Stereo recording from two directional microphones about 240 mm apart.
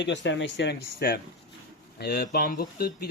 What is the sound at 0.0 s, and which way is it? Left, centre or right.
Speech, left.